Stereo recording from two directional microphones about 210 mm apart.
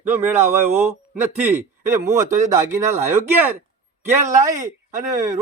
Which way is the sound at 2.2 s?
35° right (ahead or behind).